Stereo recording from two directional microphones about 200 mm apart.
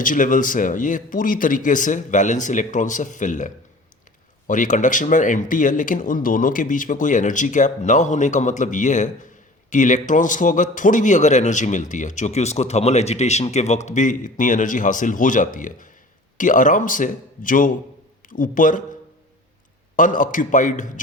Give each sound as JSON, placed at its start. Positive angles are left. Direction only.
{"t": 0.0, "sound": "a man's voice", "side_deg": 40}
{"t": 20.0, "sound": "a man's voice", "side_deg": 40}